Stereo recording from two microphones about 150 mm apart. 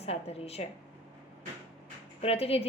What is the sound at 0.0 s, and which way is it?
Speech, 45° left (ahead or behind).